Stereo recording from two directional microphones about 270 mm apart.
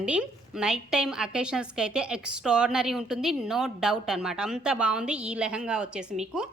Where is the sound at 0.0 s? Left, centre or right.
Centre.